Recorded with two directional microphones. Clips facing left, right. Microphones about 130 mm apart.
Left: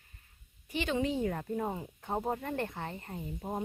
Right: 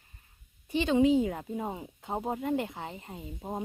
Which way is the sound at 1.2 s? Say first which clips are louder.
Right 2 dB; 10° right (ahead or behind).